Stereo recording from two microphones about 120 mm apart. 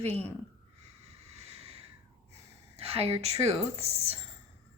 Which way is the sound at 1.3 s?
60° right (ahead or behind).